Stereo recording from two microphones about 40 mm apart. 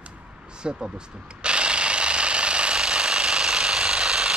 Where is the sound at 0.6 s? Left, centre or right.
Right.